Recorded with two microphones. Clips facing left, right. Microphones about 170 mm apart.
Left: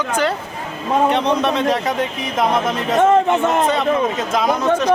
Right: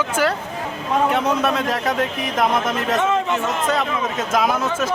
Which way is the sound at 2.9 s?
50° left (ahead or behind).